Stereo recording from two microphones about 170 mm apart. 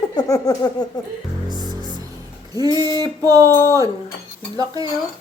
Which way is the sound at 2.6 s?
25° right (ahead or behind).